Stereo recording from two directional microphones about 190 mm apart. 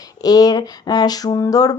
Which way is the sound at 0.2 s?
20° left (ahead or behind).